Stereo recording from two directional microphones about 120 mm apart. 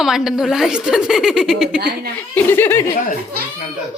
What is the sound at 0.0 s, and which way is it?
A woman's voice, 5° right (ahead or behind).